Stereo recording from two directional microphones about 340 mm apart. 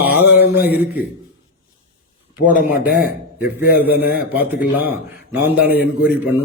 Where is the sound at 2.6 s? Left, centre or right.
Left.